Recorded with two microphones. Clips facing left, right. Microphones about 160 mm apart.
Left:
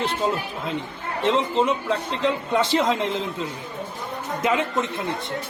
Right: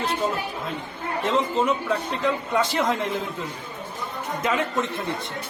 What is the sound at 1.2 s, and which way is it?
A man's voice, 25° left (ahead or behind).